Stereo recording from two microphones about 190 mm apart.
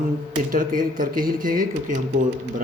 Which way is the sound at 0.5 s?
45° right (ahead or behind).